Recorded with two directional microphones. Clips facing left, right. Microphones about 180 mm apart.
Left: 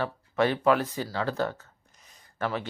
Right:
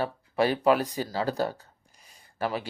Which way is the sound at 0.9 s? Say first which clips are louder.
Right 1 dB; 40° right (ahead or behind).